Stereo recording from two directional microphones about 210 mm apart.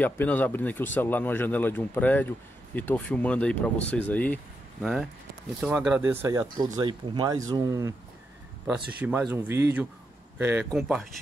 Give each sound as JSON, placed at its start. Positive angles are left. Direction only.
{"t": 0.0, "sound": "speech", "side_deg": 10}
{"t": 5.6, "sound": "speech", "side_deg": -5}
{"t": 8.6, "sound": "speech", "side_deg": -5}